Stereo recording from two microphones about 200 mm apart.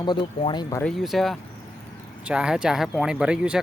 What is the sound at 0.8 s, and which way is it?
Speech, centre (ahead or behind).